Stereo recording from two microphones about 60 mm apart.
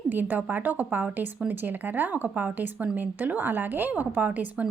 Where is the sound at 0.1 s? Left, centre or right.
Right.